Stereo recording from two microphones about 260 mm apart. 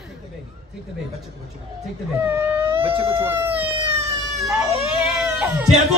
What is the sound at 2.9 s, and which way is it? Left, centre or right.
Speech, right.